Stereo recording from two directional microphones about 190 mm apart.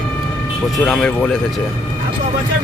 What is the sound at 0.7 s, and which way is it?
Speech, centre (ahead or behind).